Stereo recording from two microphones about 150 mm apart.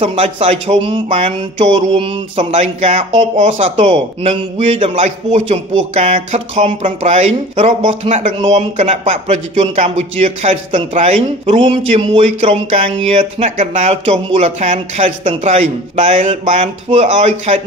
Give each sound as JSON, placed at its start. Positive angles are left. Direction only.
{"t": 0.0, "sound": "speech", "side_deg": -40}
{"t": 2.6, "sound": "a man's voice", "side_deg": -55}
{"t": 3.7, "sound": "speech", "side_deg": -40}
{"t": 4.9, "sound": "a man's voice", "side_deg": -55}
{"t": 5.5, "sound": "speech", "side_deg": -40}
{"t": 8.1, "sound": "a man's voice", "side_deg": -50}
{"t": 13.4, "sound": "a man's voice", "side_deg": -50}